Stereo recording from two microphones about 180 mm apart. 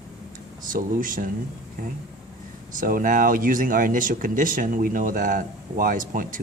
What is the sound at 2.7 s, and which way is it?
Speech, 50° right (ahead or behind).